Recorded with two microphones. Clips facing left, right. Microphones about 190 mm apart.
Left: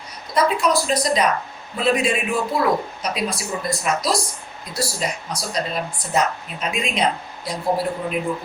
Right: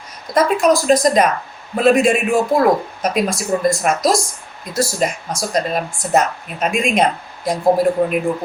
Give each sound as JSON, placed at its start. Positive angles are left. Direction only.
{"t": 0.3, "sound": "speech", "side_deg": -45}